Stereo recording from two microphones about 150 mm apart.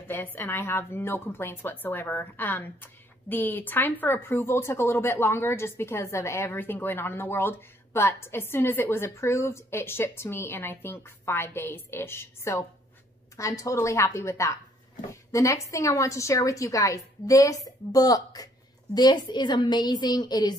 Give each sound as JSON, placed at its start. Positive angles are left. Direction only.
{"t": 0.1, "sound": "a woman's voice", "side_deg": 10}